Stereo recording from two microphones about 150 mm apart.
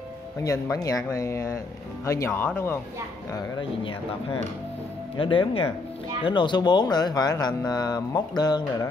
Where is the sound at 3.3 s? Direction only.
35° left (ahead or behind).